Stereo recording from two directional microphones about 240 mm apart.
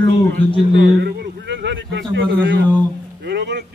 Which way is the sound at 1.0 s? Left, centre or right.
Right.